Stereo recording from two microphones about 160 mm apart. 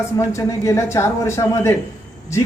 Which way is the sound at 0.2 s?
20° left (ahead or behind).